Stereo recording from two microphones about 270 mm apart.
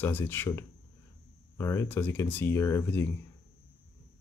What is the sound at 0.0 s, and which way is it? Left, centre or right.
Speech, centre.